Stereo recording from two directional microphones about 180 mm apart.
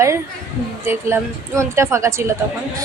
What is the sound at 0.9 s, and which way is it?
A woman's voice, 15° right (ahead or behind).